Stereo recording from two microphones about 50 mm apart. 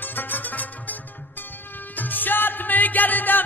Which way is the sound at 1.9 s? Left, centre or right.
Left.